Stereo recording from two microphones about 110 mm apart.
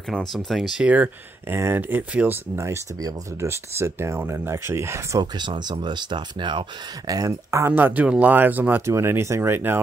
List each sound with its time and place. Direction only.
0.1 s speech: 5° left (ahead or behind); by 5.2 s 25° right (ahead or behind)
5.2 s speech: 40° right (ahead or behind)
7.1 s speech: 35° right (ahead or behind)